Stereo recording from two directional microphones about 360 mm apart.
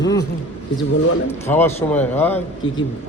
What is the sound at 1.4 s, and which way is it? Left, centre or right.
Speech, centre.